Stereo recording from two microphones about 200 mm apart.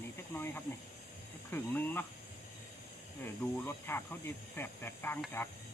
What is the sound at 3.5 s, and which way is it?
Speech, 10° left (ahead or behind).